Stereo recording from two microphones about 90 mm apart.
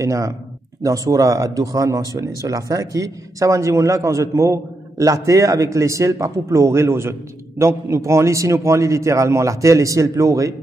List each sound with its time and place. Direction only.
0.0 s speech: 35° right (ahead or behind)